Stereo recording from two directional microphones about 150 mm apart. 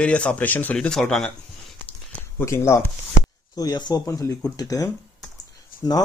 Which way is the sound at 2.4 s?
15° left (ahead or behind).